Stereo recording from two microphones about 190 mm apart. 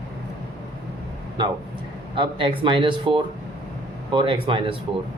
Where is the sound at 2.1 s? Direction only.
25° right (ahead or behind).